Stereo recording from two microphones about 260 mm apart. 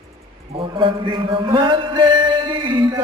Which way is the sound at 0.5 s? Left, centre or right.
Centre.